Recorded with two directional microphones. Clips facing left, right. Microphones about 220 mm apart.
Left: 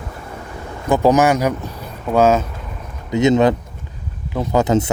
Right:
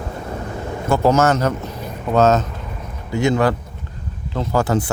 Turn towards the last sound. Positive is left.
turn(degrees=20)  # may be behind; listen again after turning